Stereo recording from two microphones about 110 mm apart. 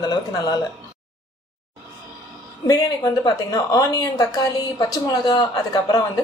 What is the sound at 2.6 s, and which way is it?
A woman's voice, 35° left (ahead or behind).